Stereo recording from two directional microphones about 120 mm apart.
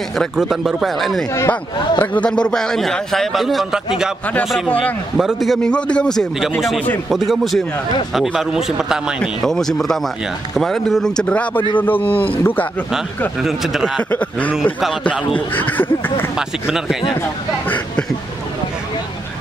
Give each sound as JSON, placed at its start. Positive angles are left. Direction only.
{"t": 0.2, "sound": "a man's voice", "side_deg": 0}
{"t": 1.5, "sound": "a man's voice", "side_deg": 10}
{"t": 5.1, "sound": "a man's voice", "side_deg": 0}
{"t": 13.4, "sound": "a man's voice", "side_deg": -5}
{"t": 15.5, "sound": "speech", "side_deg": 15}
{"t": 16.3, "sound": "a man's voice", "side_deg": -5}